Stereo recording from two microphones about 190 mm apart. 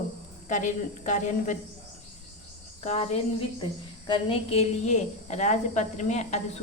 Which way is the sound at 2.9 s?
30° left (ahead or behind).